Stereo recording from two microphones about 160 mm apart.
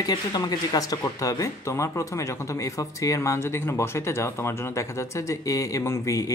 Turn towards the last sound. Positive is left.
turn(degrees=20)  # may be behind; listen again after turning